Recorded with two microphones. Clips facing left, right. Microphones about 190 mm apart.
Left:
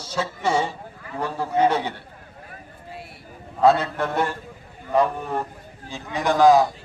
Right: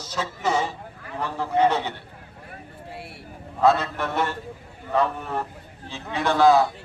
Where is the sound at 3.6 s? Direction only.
30° left (ahead or behind).